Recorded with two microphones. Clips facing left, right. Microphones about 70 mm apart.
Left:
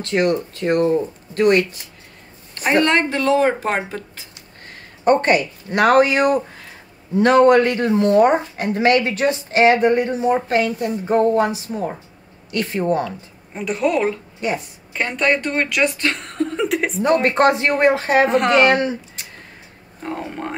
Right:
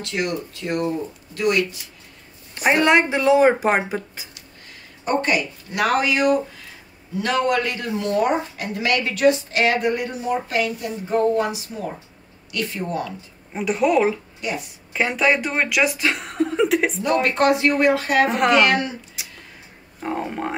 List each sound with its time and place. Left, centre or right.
0.0 s speech: left
2.5 s speech: centre
4.6 s speech: left
13.5 s speech: centre
14.4 s speech: left
15.0 s speech: centre
17.0 s speech: left
18.3 s speech: centre
18.6 s speech: left
19.2 s a sound: centre
20.0 s speech: centre